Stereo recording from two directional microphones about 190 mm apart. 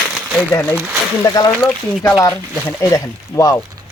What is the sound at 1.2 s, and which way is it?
Speech, 20° left (ahead or behind).